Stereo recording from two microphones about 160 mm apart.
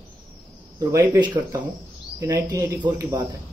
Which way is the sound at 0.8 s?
25° right (ahead or behind).